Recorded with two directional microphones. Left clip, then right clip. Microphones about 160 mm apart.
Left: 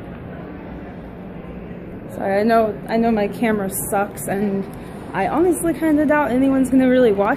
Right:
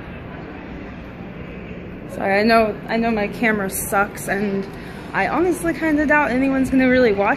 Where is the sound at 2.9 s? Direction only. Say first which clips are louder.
Left 2 dB; 20° left (ahead or behind).